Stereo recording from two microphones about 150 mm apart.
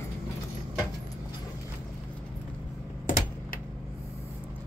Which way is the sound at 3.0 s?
60° left (ahead or behind).